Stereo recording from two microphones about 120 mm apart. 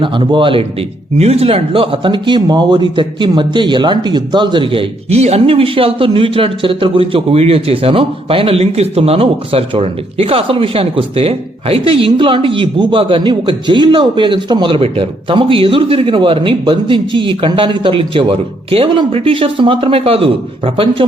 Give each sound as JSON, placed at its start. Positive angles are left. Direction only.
{"t": 0.0, "sound": "a man's voice", "side_deg": -45}